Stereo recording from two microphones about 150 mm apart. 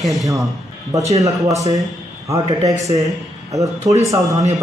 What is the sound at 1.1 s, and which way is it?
Speech, 20° right (ahead or behind).